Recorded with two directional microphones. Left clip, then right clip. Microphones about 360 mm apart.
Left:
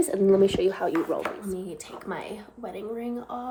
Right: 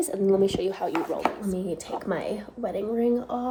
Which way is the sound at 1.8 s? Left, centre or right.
Centre.